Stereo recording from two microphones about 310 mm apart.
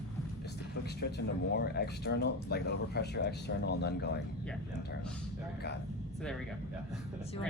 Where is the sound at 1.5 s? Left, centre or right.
Left.